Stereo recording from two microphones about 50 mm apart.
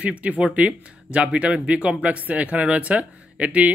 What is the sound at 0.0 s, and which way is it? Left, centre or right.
Speech, right.